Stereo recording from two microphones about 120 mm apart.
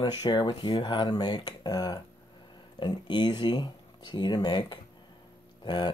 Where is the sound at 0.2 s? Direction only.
35° left (ahead or behind).